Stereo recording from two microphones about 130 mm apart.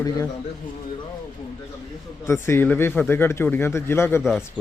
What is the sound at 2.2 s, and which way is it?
Speech, 20° left (ahead or behind).